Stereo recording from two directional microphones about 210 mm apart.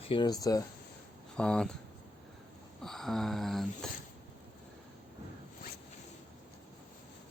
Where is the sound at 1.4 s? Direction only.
5° left (ahead or behind).